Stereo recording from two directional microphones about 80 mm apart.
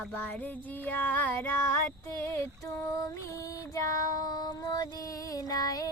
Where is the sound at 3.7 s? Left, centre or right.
Left.